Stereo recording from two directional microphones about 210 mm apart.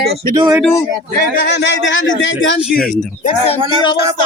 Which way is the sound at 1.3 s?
50° left (ahead or behind).